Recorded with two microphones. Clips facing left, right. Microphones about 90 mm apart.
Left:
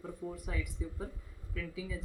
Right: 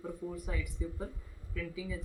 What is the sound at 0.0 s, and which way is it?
Speech, centre (ahead or behind).